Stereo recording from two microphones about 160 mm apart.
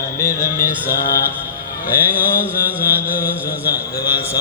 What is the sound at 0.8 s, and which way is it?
Speech, 70° left (ahead or behind).